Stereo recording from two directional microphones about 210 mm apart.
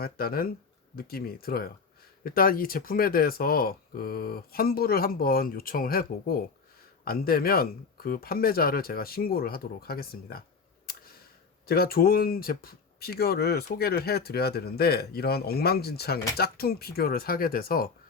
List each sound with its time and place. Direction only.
0.0 s speech: 45° left (ahead or behind)
11.6 s speech: 45° left (ahead or behind)